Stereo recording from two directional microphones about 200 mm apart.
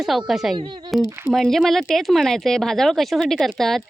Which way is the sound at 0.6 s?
25° right (ahead or behind).